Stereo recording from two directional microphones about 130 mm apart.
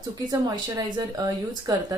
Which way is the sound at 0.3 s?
30° right (ahead or behind).